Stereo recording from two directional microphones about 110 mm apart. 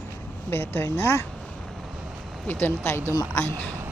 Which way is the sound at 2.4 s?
20° left (ahead or behind).